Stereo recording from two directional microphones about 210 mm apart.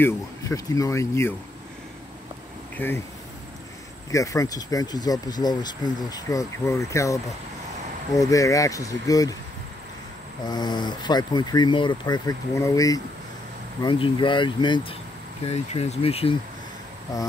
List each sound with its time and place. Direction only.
0.0 s speech: 15° left (ahead or behind)
2.8 s speech: 10° left (ahead or behind)
4.1 s speech: 15° left (ahead or behind)
8.2 s speech: 15° left (ahead or behind)
10.4 s speech: 20° left (ahead or behind)
17.1 s speech: 15° left (ahead or behind)